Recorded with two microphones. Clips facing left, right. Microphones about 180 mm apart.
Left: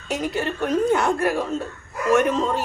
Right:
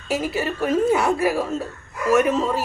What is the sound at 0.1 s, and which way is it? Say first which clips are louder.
A woman's voice: right 1 dB; 5° right (ahead or behind).